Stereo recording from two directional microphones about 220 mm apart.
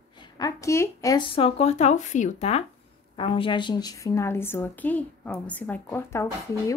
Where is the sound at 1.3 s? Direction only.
25° left (ahead or behind).